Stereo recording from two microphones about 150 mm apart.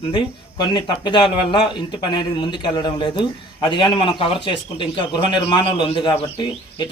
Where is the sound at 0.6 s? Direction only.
30° left (ahead or behind).